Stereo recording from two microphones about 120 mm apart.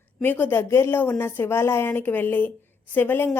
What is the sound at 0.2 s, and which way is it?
A woman's voice, 15° left (ahead or behind).